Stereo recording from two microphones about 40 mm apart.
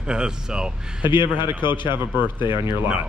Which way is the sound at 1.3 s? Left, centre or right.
Right.